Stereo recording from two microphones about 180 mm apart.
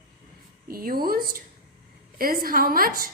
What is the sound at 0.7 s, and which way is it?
A woman's voice, 55° right (ahead or behind).